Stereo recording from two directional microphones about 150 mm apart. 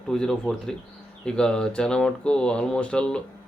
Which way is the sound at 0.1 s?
5° left (ahead or behind).